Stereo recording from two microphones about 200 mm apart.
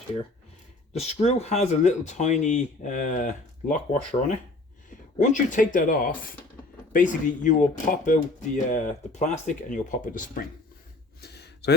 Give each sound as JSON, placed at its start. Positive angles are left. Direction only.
{"t": 0.9, "sound": "speech", "side_deg": 35}
{"t": 4.9, "sound": "speech", "side_deg": 40}
{"t": 11.2, "sound": "a sound", "side_deg": 55}